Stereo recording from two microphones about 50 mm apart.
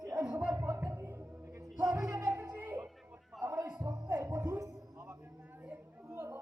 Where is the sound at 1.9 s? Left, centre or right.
Right.